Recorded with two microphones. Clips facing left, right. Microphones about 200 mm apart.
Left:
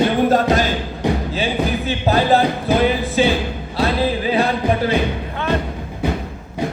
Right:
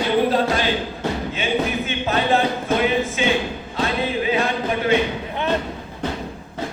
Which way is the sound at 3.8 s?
35° left (ahead or behind).